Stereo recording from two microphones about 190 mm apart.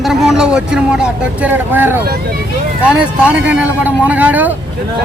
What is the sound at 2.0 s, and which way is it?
Speech, 55° right (ahead or behind).